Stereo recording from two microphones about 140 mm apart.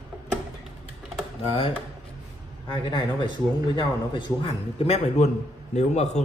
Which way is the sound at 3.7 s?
35° left (ahead or behind).